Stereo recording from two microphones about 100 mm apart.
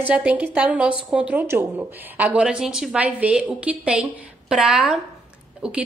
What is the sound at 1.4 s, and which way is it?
Speech, 25° right (ahead or behind).